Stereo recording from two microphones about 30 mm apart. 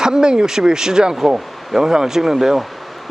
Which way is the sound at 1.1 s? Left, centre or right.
Centre.